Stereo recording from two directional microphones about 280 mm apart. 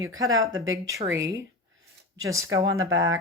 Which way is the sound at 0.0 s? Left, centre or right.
Centre.